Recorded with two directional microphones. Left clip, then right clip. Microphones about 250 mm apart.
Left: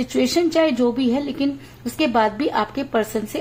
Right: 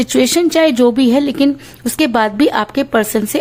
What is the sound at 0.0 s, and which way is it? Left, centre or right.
A woman's voice, right.